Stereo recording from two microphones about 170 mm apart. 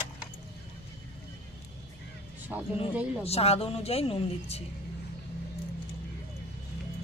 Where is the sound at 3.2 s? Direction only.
35° left (ahead or behind).